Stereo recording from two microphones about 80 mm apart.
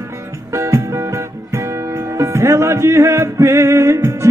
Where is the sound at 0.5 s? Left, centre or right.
Right.